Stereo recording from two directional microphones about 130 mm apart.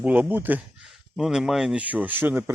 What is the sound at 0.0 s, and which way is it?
Speech, 10° right (ahead or behind).